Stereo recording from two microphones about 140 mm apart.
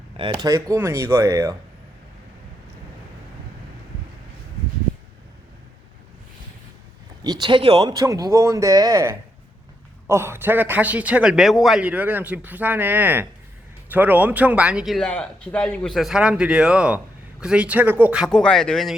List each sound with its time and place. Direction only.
0.2 s speech: 35° right (ahead or behind); by 1.5 s 20° right (ahead or behind)
7.3 s a man's voice: 30° right (ahead or behind); by 14.9 s 5° right (ahead or behind)
14.9 s a man's voice: 5° left (ahead or behind)
18.3 s a man's voice: 5° left (ahead or behind)